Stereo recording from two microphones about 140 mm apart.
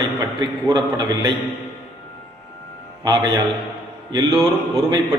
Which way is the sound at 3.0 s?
30° right (ahead or behind).